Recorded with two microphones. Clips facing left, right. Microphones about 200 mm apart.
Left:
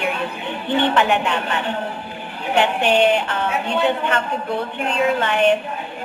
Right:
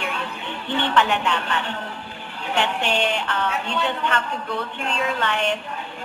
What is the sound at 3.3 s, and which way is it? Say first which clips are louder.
Speech: left 4 dB; 15° left (ahead or behind).